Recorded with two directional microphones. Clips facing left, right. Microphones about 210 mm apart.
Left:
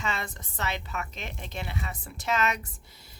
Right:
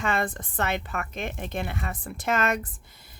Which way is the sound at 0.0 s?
55° right (ahead or behind).